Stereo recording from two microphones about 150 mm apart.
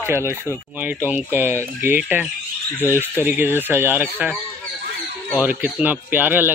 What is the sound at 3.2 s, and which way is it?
A man's voice, 15° right (ahead or behind).